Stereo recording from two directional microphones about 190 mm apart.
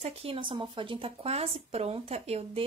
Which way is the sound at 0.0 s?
30° right (ahead or behind).